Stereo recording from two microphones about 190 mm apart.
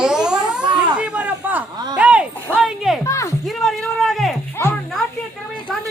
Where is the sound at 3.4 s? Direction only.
Centre (ahead or behind).